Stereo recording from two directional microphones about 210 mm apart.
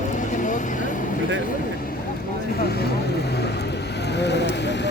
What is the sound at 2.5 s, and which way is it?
Vehicle, 50° left (ahead or behind).